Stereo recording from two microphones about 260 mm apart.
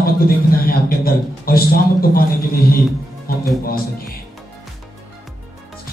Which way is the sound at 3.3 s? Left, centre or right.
Left.